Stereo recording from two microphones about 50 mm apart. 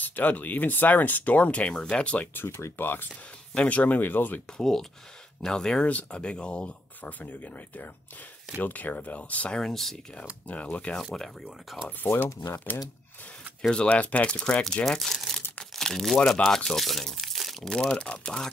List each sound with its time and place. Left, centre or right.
0.0 s speech: left
2.3 s speech: left
3.5 s speech: left
4.6 s speech: centre
5.9 s speech: left
7.0 s speech: left
9.5 s speech: centre
10.4 s speech: left
11.0 s speech: centre
12.0 s speech: left
13.6 s speech: centre
14.9 s speech: centre
17.6 s speech: centre